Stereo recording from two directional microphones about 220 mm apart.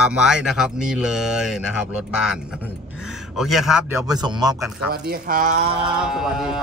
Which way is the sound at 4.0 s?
20° right (ahead or behind).